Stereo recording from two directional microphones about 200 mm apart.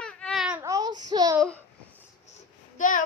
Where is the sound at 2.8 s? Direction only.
40° left (ahead or behind).